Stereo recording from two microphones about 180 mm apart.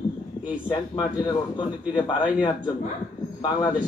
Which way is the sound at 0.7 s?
25° left (ahead or behind).